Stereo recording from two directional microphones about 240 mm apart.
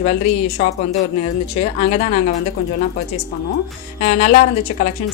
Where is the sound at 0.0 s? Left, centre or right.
Left.